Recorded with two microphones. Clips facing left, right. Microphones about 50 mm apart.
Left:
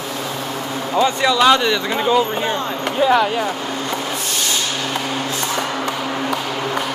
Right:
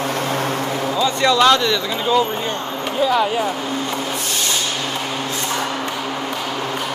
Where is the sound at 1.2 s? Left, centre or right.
Centre.